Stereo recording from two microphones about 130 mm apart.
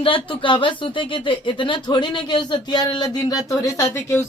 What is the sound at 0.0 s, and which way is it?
Speech, 40° left (ahead or behind).